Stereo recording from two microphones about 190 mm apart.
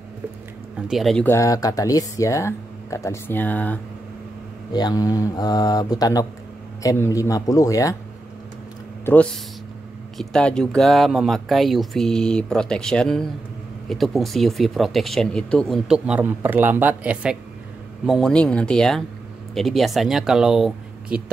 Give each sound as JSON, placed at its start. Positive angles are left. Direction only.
{"t": 0.8, "sound": "speech", "side_deg": 0}
{"t": 4.7, "sound": "speech", "side_deg": 20}
{"t": 9.0, "sound": "speech", "side_deg": 5}